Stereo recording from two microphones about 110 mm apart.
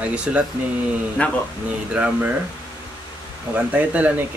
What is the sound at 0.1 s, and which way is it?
Speech, 10° right (ahead or behind).